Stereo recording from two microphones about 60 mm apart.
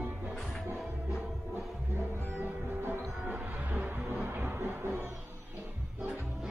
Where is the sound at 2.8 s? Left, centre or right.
Right.